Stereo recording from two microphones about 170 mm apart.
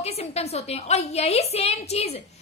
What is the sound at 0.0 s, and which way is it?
A woman's voice, 40° left (ahead or behind).